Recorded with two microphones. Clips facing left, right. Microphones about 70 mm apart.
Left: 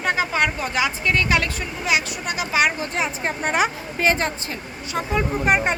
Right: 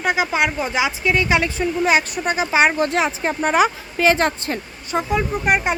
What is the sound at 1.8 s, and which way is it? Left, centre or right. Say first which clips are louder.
Speech: right 4 dB; right.